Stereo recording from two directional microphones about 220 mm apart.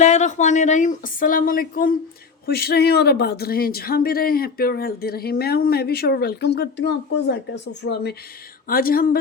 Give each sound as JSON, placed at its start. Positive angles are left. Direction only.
{"t": 0.0, "sound": "speech", "side_deg": 30}